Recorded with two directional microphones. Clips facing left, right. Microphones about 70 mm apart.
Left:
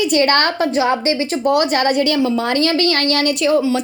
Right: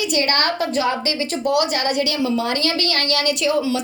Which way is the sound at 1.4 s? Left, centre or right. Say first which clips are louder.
Left 4 dB; left.